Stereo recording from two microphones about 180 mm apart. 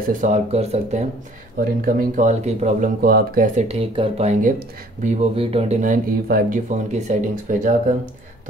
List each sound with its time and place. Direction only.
0.2 s speech: 40° right (ahead or behind)
1.6 s speech: 55° right (ahead or behind)
3.0 s speech: 60° right (ahead or behind)
3.6 s speech: 30° right (ahead or behind); by 5.2 s 45° right (ahead or behind)
5.3 s speech: 30° right (ahead or behind); by 8.1 s 50° right (ahead or behind)